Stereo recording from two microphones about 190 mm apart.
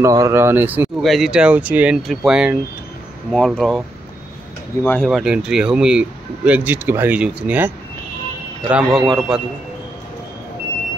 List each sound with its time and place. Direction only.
0.0 s speech: 15° right (ahead or behind); by 3.8 s centre (ahead or behind)
4.8 s speech: 5° left (ahead or behind)